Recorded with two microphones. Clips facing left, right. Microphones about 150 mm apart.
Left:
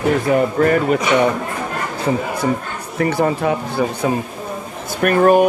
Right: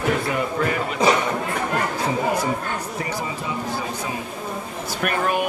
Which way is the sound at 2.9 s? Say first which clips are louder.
Left 10 dB; 60° left (ahead or behind).